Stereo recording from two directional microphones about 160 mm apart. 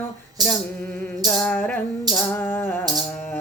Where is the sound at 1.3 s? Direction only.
10° left (ahead or behind).